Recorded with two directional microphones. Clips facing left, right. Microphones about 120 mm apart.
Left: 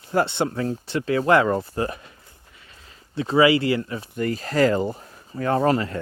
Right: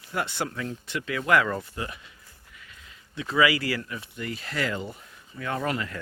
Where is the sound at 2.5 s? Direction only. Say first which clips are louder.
Even; 30° left (ahead or behind).